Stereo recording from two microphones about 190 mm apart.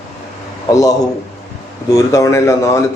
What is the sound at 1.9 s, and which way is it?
Speech, 15° left (ahead or behind).